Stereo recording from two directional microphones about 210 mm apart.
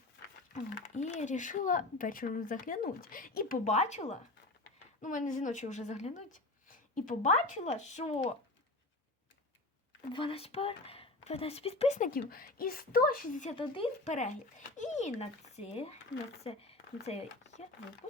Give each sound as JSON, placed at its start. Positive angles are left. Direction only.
{"t": 0.5, "sound": "speech", "side_deg": 35}
{"t": 10.1, "sound": "speech", "side_deg": 25}
{"t": 13.6, "sound": "speech", "side_deg": 25}